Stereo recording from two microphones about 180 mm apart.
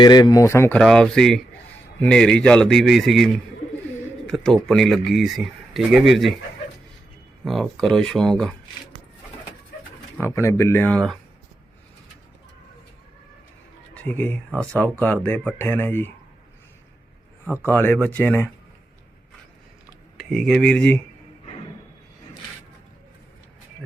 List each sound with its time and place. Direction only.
0.0 s speech: 25° left (ahead or behind)
0.8 s speech: centre (ahead or behind)
7.4 s speech: centre (ahead or behind)
10.2 s speech: 15° left (ahead or behind)
13.9 s speech: 10° left (ahead or behind)
17.7 s speech: 10° left (ahead or behind)
20.1 s speech: centre (ahead or behind)